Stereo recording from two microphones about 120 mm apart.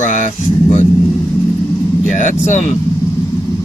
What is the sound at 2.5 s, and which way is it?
Speech, 80° left.